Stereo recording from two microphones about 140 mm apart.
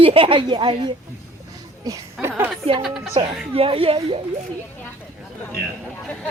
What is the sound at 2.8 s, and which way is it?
Speech, centre (ahead or behind).